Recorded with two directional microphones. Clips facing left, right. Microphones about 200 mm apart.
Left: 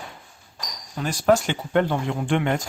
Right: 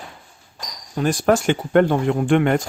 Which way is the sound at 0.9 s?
50° right (ahead or behind).